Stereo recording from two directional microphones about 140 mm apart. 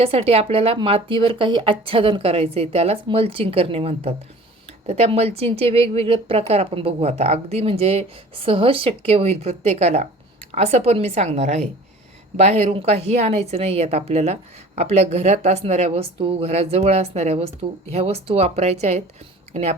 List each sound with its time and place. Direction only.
0.0 s speech: 45° right (ahead or behind)